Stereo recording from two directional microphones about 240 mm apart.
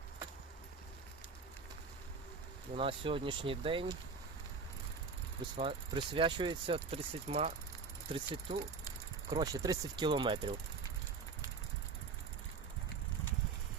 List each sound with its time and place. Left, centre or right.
2.7 s speech: right
5.5 s speech: right